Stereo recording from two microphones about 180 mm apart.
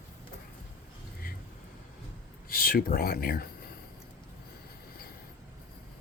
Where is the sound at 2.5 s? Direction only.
55° left (ahead or behind).